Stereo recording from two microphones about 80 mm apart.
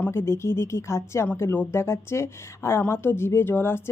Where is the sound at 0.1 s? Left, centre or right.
Left.